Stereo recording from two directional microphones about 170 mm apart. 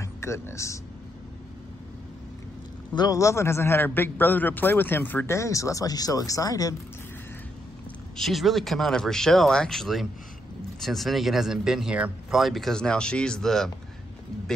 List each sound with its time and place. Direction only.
0.0 s speech: 15° left (ahead or behind)
3.0 s a man's voice: 20° left (ahead or behind)
8.2 s speech: centre (ahead or behind)